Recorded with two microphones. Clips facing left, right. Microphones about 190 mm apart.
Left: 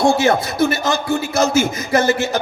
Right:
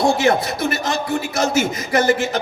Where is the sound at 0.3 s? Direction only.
25° left (ahead or behind).